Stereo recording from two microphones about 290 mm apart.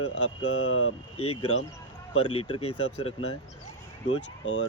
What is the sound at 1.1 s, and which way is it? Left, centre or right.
Speech, centre.